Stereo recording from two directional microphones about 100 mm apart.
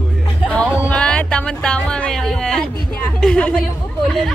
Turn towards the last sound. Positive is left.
turn(degrees=5)  # may be behind; listen again after turning